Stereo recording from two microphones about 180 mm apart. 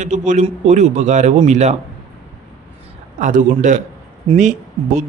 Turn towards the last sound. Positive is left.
turn(degrees=-45)  # may be behind; listen again after turning